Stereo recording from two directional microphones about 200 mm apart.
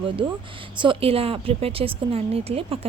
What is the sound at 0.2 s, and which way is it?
A woman's voice, 25° right (ahead or behind).